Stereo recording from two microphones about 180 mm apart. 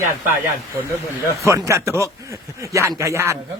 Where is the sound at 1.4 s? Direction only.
15° right (ahead or behind).